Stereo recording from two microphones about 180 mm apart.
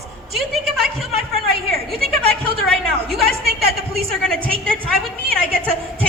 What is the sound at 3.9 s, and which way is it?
Speech, centre (ahead or behind).